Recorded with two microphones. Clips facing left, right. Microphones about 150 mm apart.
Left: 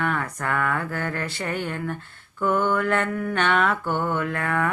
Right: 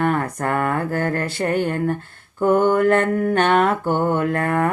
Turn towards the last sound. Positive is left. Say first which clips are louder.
# right 5 dB
turn(degrees=-45)  # may be behind; listen again after turning